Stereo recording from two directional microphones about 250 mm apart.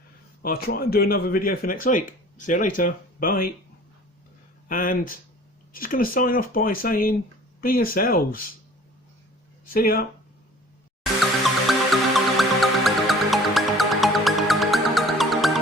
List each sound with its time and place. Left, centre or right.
0.4 s speech: left
4.7 s speech: left
9.6 s speech: left
11.9 s music: centre